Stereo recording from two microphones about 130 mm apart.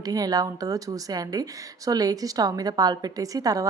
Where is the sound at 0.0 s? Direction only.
30° right (ahead or behind).